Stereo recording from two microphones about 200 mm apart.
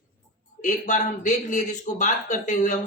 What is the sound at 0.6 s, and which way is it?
A man's voice, 40° left (ahead or behind).